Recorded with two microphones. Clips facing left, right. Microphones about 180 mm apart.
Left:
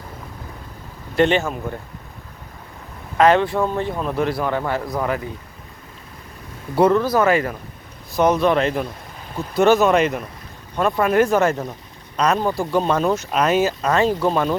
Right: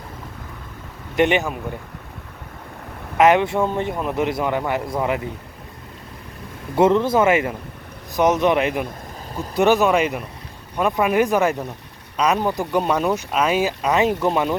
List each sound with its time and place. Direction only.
1.1 s speech: 15° right (ahead or behind)
3.2 s a man's voice: 20° right (ahead or behind)
6.7 s a man's voice: 25° right (ahead or behind)